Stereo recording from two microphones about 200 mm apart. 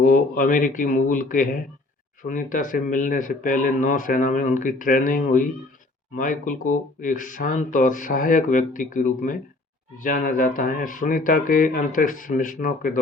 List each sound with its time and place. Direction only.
0.0 s a man's voice: 45° left (ahead or behind)